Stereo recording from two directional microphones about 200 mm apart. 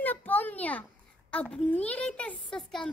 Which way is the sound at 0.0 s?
10° left (ahead or behind).